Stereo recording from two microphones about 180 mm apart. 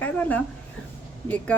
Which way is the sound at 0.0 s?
10° left (ahead or behind).